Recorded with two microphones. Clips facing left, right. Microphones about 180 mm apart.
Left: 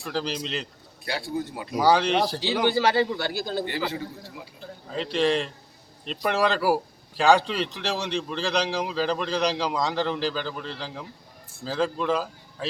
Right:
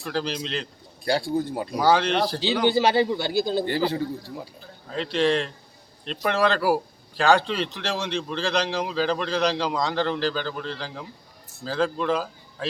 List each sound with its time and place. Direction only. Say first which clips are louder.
0.0 s a man's voice: right 1 dB; centre (ahead or behind)
1.8 s a man's voice: even; centre (ahead or behind)
2.6 s a man's voice: right 2 dB; 15° right (ahead or behind)
3.7 s a man's voice: right 6 dB; 35° right (ahead or behind)
4.9 s a man's voice: right 1 dB; centre (ahead or behind)